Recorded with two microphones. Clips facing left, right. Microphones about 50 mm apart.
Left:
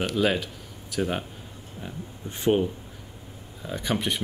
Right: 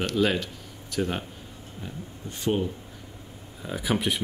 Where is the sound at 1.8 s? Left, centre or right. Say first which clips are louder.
Left 1 dB; left.